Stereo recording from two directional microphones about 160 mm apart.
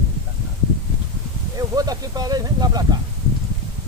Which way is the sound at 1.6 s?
25° right (ahead or behind).